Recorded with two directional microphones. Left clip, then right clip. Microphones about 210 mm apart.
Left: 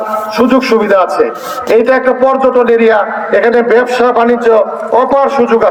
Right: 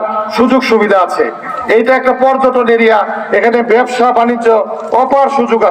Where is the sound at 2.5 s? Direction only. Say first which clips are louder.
Left 1 dB; centre (ahead or behind).